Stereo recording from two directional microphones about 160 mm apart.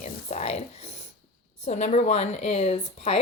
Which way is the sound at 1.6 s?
40° left (ahead or behind).